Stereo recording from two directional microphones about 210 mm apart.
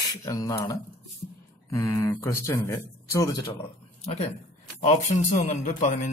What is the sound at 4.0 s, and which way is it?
Speech, 30° left (ahead or behind).